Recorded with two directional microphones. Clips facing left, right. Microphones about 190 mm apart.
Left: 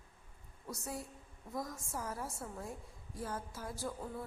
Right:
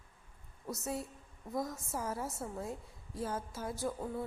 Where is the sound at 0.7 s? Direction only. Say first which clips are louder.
Right 5 dB; 25° right (ahead or behind).